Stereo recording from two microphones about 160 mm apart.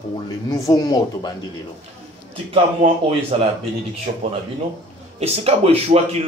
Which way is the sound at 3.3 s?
40° right (ahead or behind).